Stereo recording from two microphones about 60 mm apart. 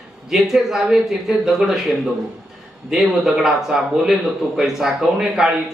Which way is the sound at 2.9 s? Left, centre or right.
Centre.